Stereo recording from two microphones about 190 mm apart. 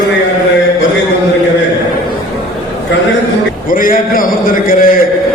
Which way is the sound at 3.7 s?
45° left (ahead or behind).